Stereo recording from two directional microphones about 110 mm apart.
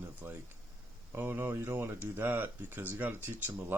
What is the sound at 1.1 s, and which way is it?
Speech, 20° right (ahead or behind).